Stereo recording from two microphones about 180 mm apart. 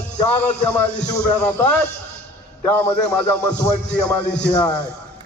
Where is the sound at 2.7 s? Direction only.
15° left (ahead or behind).